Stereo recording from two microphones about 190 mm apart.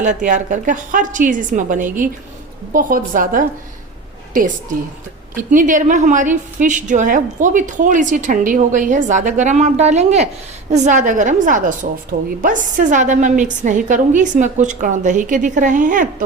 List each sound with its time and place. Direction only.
0.0 s a woman's voice: 40° right (ahead or behind)
5.3 s a woman's voice: 45° right (ahead or behind)